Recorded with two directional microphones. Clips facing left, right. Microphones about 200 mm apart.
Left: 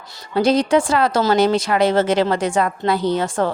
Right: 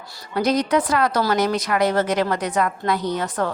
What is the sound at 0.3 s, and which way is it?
A woman's voice, 30° left (ahead or behind).